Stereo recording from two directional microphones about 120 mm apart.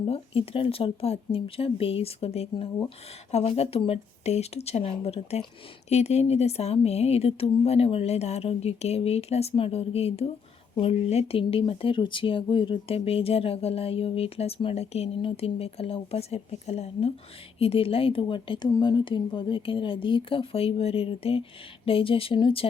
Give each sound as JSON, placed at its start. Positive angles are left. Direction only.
{"t": 0.1, "sound": "speech", "side_deg": 50}